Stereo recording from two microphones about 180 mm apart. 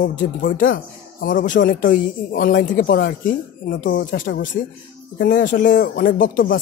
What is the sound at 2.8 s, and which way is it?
Speech, 65° left (ahead or behind).